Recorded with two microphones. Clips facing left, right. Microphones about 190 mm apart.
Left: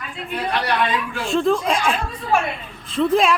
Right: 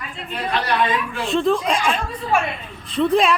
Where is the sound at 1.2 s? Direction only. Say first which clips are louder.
Even; centre (ahead or behind).